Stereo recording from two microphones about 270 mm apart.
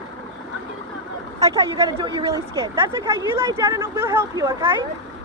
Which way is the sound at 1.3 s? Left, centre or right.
Centre.